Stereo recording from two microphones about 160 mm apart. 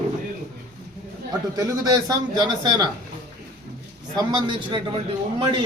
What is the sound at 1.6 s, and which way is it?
A man's voice, 20° right (ahead or behind).